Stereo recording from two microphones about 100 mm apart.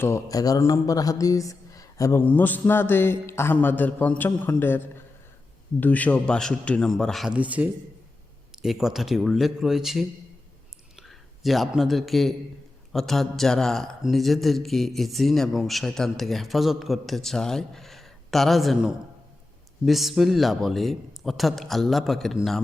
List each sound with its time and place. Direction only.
0.0 s speech: 30° left (ahead or behind)
2.1 s a man's voice: 20° left (ahead or behind); by 7.3 s centre (ahead or behind)
7.3 s speech: 15° right (ahead or behind)
8.5 s a man's voice: 5° right (ahead or behind)